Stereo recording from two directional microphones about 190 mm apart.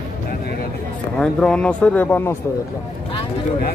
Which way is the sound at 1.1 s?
5° left (ahead or behind).